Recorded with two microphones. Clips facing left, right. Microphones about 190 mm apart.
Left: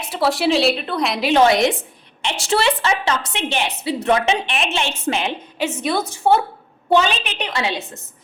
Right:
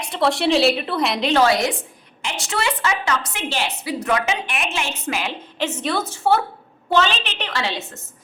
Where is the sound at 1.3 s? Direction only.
20° left (ahead or behind).